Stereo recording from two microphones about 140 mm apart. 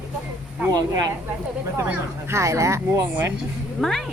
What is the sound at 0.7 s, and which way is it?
Speech, 30° right (ahead or behind).